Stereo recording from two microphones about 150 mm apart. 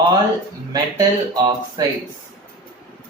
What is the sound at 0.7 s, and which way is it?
Speech, 25° right (ahead or behind).